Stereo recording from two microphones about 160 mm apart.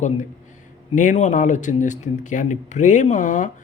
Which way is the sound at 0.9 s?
50° left (ahead or behind).